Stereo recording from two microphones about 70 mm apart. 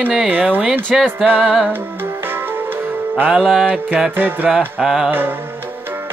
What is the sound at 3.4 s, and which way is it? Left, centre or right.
Music, centre.